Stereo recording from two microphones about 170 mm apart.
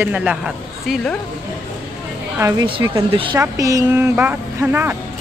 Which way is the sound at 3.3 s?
20° right (ahead or behind).